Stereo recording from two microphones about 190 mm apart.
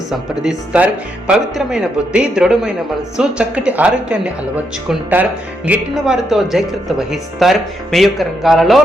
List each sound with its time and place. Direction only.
0.1 s speech: 5° right (ahead or behind)